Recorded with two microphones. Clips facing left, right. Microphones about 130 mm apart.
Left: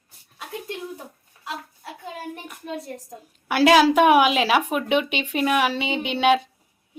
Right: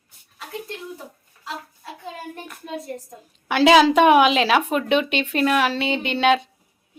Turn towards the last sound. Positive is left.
turn(degrees=10)  # may be behind; listen again after turning